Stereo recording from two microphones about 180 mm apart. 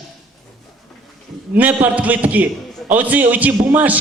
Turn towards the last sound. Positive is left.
turn(degrees=-10)  # may be behind; listen again after turning